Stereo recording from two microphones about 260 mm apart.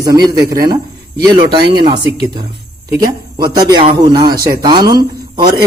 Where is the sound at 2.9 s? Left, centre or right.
Centre.